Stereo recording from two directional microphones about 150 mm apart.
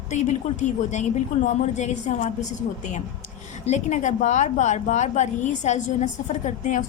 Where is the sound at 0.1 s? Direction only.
50° left (ahead or behind).